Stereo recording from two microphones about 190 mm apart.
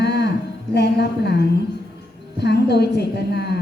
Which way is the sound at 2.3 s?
60° left (ahead or behind).